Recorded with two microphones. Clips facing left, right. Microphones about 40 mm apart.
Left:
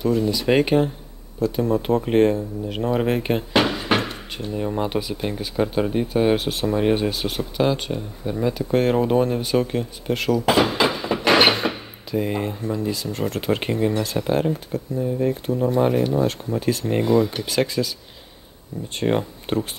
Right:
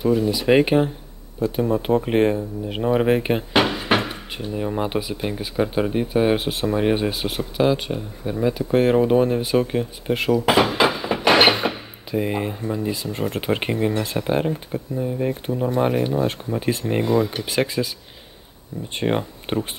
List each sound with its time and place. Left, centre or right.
0.0 s speech: centre
16.3 s speech: right
16.9 s speech: centre
17.5 s speech: centre
18.9 s speech: centre